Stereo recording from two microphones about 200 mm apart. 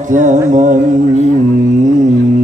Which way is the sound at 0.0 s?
40° right (ahead or behind).